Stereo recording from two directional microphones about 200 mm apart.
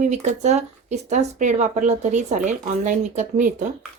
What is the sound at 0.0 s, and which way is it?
Speech, 35° right (ahead or behind).